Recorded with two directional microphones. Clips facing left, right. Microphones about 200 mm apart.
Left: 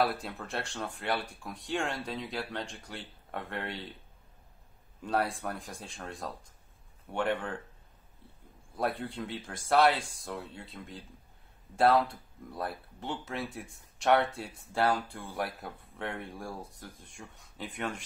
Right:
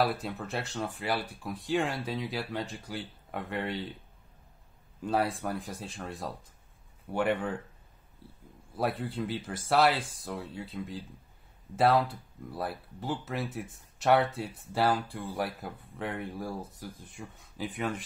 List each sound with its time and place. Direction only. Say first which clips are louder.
0.0 s speech: right 1 dB; centre (ahead or behind)
5.0 s speech: right 2 dB; centre (ahead or behind)
8.7 s speech: right 2 dB; 5° right (ahead or behind)